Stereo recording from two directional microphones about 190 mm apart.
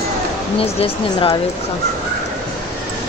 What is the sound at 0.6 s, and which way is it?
Speech, 30° left (ahead or behind).